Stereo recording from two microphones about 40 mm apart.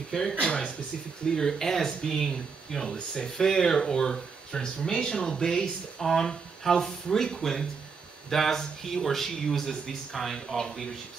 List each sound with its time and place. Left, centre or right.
0.1 s speech: centre
1.2 s speech: centre